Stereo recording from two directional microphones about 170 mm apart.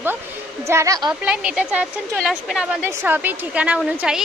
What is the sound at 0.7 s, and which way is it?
Speech, 20° right (ahead or behind).